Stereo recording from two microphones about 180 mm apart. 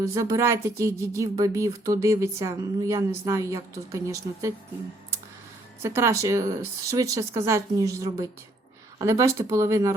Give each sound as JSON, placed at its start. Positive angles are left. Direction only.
{"t": 0.0, "sound": "speech", "side_deg": -15}
{"t": 5.8, "sound": "speech", "side_deg": -15}